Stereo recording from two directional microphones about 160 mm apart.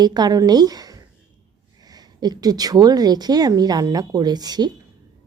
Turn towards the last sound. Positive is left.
turn(degrees=-25)  # may be behind; listen again after turning